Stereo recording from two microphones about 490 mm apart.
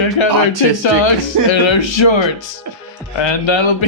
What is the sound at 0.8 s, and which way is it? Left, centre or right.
Speech, left.